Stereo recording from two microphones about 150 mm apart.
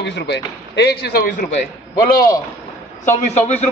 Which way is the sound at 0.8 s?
90° left.